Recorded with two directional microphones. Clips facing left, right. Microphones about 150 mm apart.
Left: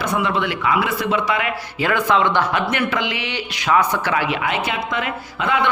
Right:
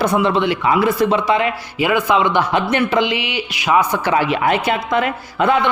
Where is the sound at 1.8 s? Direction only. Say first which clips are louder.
Right 2 dB; 10° right (ahead or behind).